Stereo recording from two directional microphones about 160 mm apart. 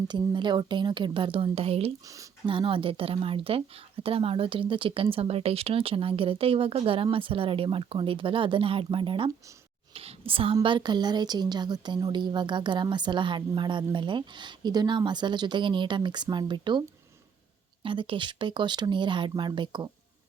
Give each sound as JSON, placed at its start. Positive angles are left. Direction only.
{"t": 0.1, "sound": "a woman's voice", "side_deg": -30}
{"t": 2.0, "sound": "speech", "side_deg": -20}
{"t": 2.5, "sound": "a woman's voice", "side_deg": -35}
{"t": 17.8, "sound": "a woman's voice", "side_deg": -30}